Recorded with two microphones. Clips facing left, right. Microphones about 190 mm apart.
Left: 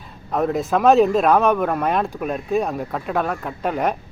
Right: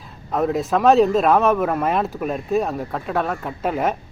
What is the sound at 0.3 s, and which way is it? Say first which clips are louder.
Speech: even; centre (ahead or behind).